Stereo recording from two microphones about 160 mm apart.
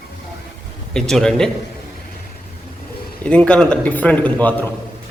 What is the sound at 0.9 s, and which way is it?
Speech, 5° left (ahead or behind).